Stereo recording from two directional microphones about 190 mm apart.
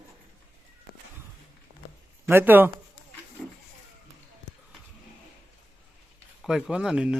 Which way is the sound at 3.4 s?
5° left (ahead or behind).